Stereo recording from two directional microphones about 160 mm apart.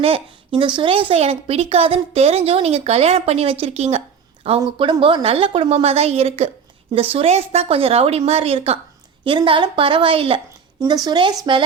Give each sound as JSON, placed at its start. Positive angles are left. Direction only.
{"t": 0.0, "sound": "a woman's voice", "side_deg": -35}
{"t": 10.8, "sound": "speech", "side_deg": -25}